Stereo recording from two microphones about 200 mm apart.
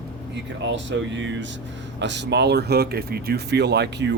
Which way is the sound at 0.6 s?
65° right (ahead or behind).